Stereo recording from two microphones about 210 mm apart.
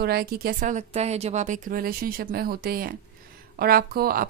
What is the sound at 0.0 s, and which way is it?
A woman's voice, 45° right (ahead or behind).